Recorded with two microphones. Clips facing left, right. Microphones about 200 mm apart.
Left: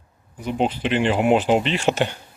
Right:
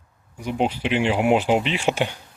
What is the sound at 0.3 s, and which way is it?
Speech, 10° right (ahead or behind).